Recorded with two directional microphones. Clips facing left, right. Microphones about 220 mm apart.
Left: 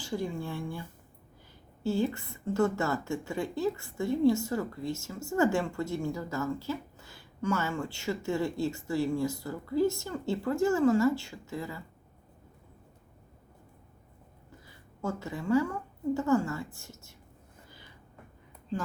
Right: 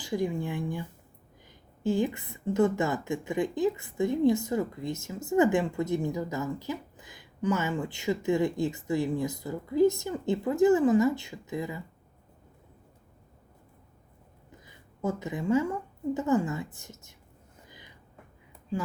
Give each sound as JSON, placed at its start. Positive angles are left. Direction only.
{"t": 0.0, "sound": "a woman's voice", "side_deg": -15}
{"t": 14.6, "sound": "a woman's voice", "side_deg": -20}
{"t": 17.7, "sound": "a sound", "side_deg": -15}